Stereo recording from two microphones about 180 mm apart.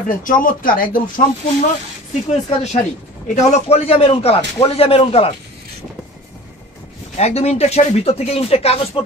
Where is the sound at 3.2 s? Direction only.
40° left (ahead or behind).